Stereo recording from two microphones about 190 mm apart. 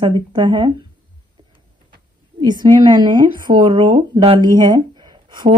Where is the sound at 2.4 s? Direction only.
20° right (ahead or behind).